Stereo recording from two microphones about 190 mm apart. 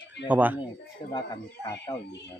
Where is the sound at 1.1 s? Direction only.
25° left (ahead or behind).